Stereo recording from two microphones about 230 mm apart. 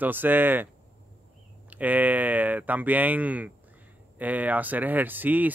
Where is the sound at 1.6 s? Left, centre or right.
Centre.